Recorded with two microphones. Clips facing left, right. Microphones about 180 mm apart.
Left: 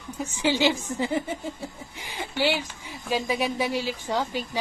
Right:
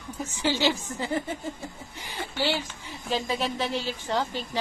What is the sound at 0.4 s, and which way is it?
A woman's voice, 15° left (ahead or behind).